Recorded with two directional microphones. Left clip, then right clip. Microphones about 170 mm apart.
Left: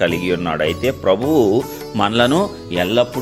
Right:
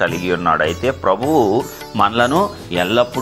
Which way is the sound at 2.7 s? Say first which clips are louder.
Even; 20° left (ahead or behind).